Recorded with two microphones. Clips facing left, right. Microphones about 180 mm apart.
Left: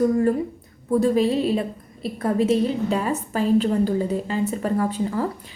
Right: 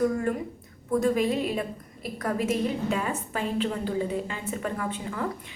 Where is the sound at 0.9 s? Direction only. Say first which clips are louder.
Left 5 dB; 30° left (ahead or behind).